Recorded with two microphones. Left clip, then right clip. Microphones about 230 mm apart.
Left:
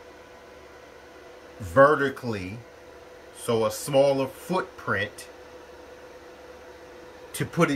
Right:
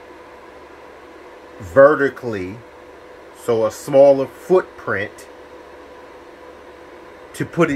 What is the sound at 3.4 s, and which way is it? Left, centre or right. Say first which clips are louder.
Speech: right 7 dB; right.